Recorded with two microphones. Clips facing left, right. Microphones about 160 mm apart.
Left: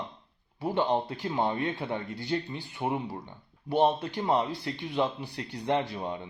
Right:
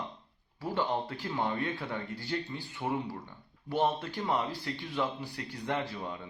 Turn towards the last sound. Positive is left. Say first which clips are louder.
# left 5 dB
turn(degrees=25)  # may be behind; listen again after turning